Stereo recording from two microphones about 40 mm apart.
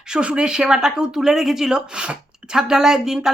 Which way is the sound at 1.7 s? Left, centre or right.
Right.